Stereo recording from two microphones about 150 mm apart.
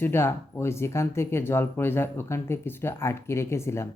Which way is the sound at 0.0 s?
15° left (ahead or behind).